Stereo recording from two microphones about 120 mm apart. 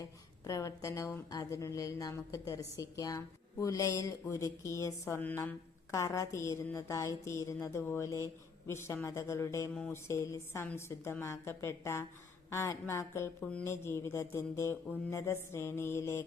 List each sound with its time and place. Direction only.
0.4 s a woman's voice: 25° left (ahead or behind)
13.4 s speech: 10° left (ahead or behind)
13.7 s a woman's voice: 20° left (ahead or behind)